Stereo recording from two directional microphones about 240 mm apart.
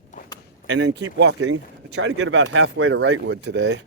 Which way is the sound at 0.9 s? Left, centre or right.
Right.